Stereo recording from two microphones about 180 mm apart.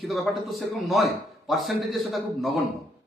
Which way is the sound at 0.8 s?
Centre (ahead or behind).